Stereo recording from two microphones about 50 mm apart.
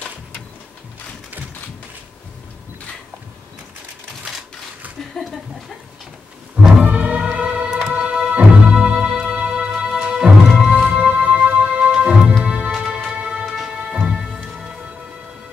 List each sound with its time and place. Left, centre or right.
4.2 s typewriter: centre
5.2 s speech: centre
6.8 s music: right